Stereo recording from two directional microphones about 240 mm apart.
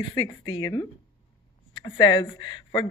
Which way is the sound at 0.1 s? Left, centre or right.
Centre.